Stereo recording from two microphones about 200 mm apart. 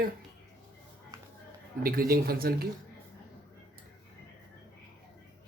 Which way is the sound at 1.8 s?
50° right (ahead or behind).